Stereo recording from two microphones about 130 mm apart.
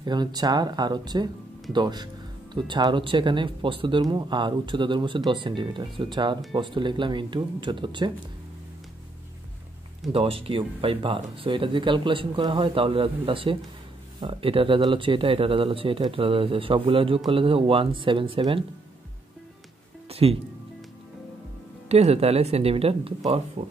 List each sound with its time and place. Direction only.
0.0 s speech: 35° right (ahead or behind)
10.1 s speech: 45° right (ahead or behind)
20.1 s music: 50° right (ahead or behind)
21.8 s speech: 55° right (ahead or behind)